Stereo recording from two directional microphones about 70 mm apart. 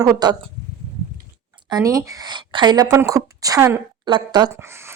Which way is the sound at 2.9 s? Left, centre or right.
Right.